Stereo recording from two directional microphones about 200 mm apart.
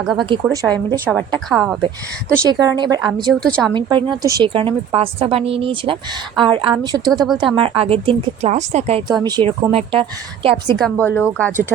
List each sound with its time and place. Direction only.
0.0 s a woman's voice: 5° right (ahead or behind)
0.5 s a woman's voice: 20° right (ahead or behind)
1.1 s a woman's voice: 5° left (ahead or behind)
2.4 s a woman's voice: 15° right (ahead or behind)
3.4 s a woman's voice: 5° left (ahead or behind)
3.8 s a woman's voice: 25° right (ahead or behind)
10.7 s speech: 5° left (ahead or behind)